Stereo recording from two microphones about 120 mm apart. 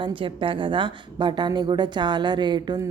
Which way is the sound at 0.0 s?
45° right (ahead or behind).